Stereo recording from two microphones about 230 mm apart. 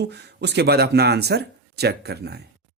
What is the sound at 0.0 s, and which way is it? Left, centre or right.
Speech, right.